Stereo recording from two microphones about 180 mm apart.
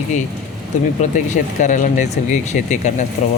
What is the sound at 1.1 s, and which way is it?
Speech, 45° left (ahead or behind).